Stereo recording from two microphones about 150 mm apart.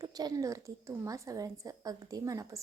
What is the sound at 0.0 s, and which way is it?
A woman's voice, 25° right (ahead or behind).